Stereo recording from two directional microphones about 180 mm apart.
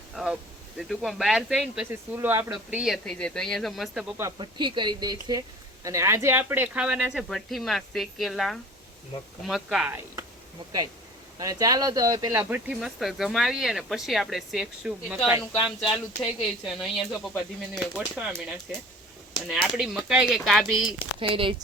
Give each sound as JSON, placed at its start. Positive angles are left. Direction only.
{"t": 0.2, "sound": "a sound", "side_deg": -5}
{"t": 0.8, "sound": "speech", "side_deg": 0}
{"t": 4.2, "sound": "speech", "side_deg": -25}
{"t": 10.6, "sound": "speech", "side_deg": -25}
{"t": 21.2, "sound": "speech", "side_deg": -30}